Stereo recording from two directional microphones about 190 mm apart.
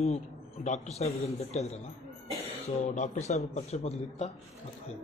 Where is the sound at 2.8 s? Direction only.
40° left (ahead or behind).